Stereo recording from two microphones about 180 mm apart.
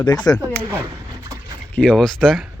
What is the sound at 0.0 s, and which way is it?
Speech, 25° left (ahead or behind).